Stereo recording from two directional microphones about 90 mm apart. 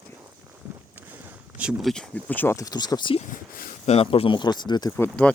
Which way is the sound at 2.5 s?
45° left (ahead or behind).